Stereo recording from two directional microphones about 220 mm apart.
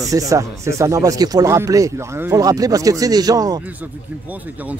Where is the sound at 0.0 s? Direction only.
15° right (ahead or behind).